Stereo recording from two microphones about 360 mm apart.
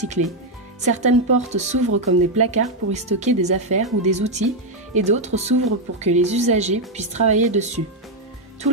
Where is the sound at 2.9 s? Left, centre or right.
Centre.